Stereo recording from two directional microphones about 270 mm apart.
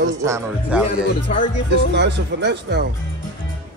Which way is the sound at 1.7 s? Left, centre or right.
Right.